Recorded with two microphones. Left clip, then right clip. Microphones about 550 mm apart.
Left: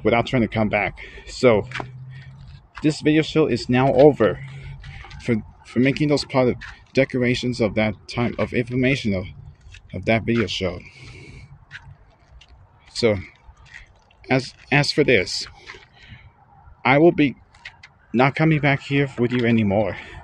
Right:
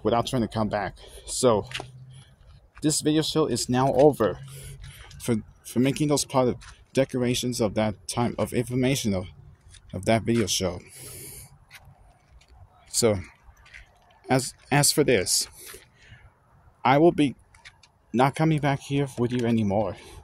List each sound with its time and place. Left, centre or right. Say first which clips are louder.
0.0 s speech: left 5 dB; right
4.6 s speech: left 6 dB; right
10.4 s mechanisms: left 2 dB; right
13.0 s speech: left 4 dB; right
14.2 s a sound: left 3 dB; right
16.8 s speech: left 4 dB; right